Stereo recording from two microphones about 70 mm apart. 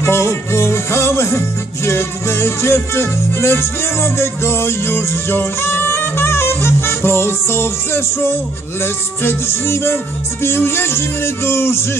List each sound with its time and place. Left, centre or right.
0.0 s music: left